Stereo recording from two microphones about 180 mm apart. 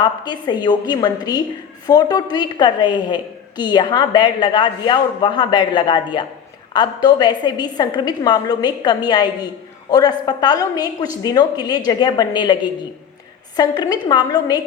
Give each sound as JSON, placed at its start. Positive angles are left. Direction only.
{"t": 0.0, "sound": "a woman's voice", "side_deg": 25}